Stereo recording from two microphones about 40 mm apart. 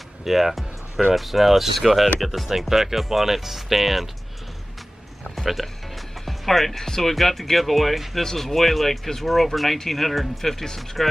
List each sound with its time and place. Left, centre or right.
0.2 s music: centre
1.1 s speech: centre
5.3 s speech: centre